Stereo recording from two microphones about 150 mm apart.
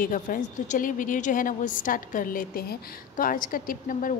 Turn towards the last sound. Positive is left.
turn(degrees=65)  # may be behind; listen again after turning